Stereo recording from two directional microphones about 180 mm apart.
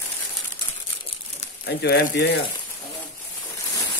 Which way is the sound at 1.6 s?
65° left (ahead or behind).